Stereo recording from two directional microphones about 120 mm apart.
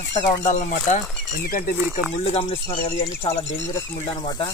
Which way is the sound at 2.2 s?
60° left (ahead or behind).